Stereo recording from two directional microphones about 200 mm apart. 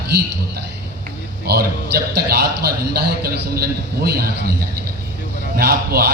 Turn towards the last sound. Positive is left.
turn(degrees=-50)  # may be behind; listen again after turning